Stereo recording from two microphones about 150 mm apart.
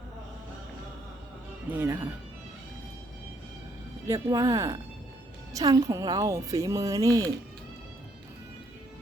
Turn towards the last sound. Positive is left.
turn(degrees=-20)  # may be behind; listen again after turning